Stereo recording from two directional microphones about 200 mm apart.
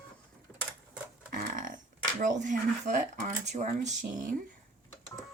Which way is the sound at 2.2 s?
40° right (ahead or behind).